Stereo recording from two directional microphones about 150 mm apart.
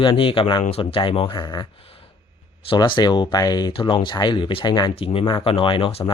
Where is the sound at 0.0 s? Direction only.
35° left (ahead or behind).